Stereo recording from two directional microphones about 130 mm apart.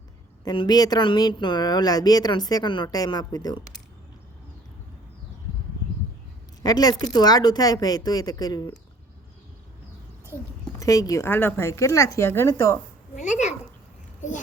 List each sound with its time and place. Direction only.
0.4 s speech: 35° left (ahead or behind)
6.6 s speech: 30° left (ahead or behind)
10.8 s a woman's voice: 25° left (ahead or behind)